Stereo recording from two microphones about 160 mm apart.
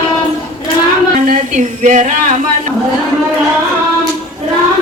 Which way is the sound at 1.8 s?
50° right (ahead or behind).